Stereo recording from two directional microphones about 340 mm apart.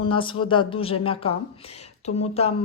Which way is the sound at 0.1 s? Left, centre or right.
Centre.